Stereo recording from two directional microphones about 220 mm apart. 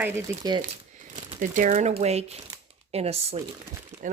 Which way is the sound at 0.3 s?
15° right (ahead or behind).